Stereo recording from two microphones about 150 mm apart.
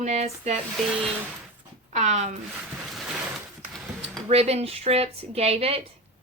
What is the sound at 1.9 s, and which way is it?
Speech, 50° right (ahead or behind).